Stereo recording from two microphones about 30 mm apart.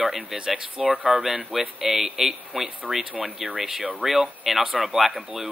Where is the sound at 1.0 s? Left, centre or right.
Centre.